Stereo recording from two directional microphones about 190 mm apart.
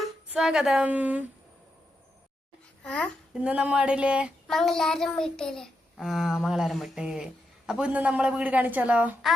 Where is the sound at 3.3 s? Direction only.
5° right (ahead or behind).